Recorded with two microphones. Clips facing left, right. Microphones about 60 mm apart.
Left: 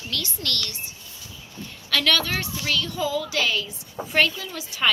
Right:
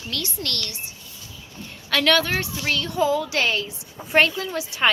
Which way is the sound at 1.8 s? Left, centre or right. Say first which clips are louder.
Right 3 dB; right.